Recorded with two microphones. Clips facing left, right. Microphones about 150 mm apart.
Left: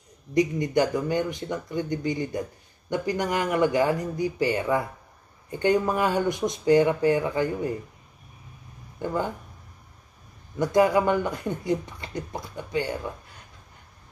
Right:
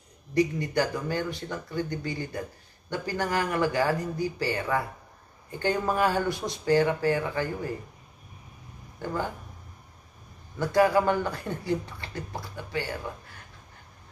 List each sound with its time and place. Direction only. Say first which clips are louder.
0.3 s speech: left 2 dB; 20° left (ahead or behind)
9.0 s speech: left 3 dB; 20° left (ahead or behind)
10.6 s speech: left 2 dB; 20° left (ahead or behind)